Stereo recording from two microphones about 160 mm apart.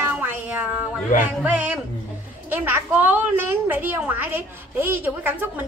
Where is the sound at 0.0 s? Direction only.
10° right (ahead or behind).